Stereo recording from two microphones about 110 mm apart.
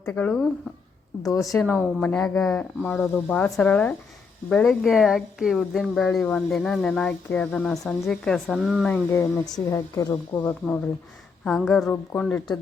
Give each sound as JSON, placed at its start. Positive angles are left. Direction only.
{"t": 0.0, "sound": "speech", "side_deg": 15}
{"t": 1.2, "sound": "speech", "side_deg": 30}
{"t": 1.5, "sound": "a woman's voice", "side_deg": 15}
{"t": 9.0, "sound": "speech", "side_deg": 30}
{"t": 11.4, "sound": "a woman's voice", "side_deg": 0}
{"t": 11.9, "sound": "speech", "side_deg": 15}